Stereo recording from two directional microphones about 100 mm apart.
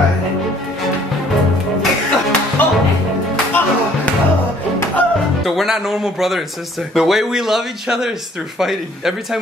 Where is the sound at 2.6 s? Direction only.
20° left (ahead or behind).